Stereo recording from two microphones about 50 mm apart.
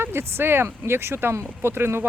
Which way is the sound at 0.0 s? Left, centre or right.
Right.